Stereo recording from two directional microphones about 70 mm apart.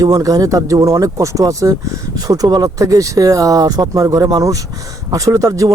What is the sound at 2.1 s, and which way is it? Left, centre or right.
Speech, right.